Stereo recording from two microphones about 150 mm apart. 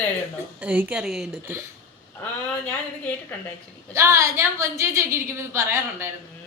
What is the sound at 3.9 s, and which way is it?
A woman's voice, 20° right (ahead or behind).